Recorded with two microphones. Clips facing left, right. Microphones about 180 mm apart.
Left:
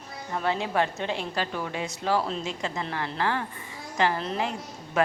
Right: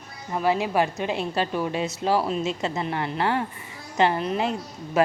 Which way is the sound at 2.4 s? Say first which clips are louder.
Right 5 dB; 25° right (ahead or behind).